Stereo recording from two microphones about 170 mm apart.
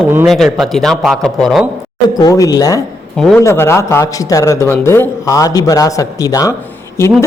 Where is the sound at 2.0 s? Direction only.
25° left (ahead or behind).